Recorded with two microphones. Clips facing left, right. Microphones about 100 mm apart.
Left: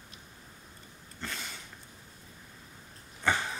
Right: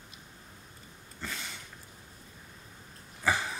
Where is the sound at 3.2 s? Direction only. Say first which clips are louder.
Even; 5° right (ahead or behind).